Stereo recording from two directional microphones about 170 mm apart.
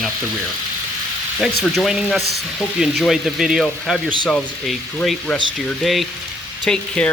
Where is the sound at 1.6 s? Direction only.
Centre (ahead or behind).